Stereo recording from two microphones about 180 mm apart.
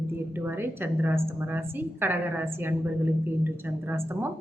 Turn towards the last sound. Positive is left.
turn(degrees=-10)  # may be behind; listen again after turning